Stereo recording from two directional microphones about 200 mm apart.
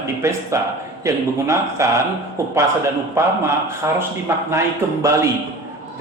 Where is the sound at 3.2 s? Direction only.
10° right (ahead or behind).